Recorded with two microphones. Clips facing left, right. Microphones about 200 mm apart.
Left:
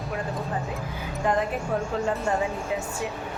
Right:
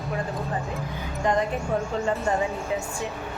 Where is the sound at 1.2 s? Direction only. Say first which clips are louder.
Right 1 dB; 5° left (ahead or behind).